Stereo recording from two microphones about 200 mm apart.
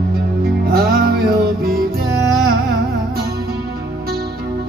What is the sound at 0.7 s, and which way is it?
Music, 50° right (ahead or behind).